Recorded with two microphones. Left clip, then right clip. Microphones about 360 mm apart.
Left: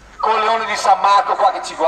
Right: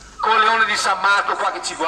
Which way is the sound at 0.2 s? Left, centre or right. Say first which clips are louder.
Right 1 dB; centre.